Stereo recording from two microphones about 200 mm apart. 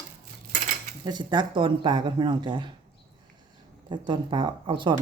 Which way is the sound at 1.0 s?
20° right (ahead or behind).